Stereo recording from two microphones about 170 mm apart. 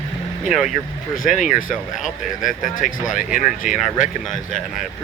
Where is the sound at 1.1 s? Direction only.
50° left (ahead or behind).